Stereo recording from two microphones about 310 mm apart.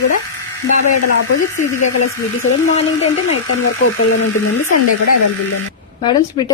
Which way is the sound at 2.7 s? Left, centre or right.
Left.